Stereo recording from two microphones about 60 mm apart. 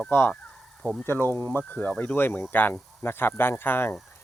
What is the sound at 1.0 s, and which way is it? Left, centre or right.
Speech, left.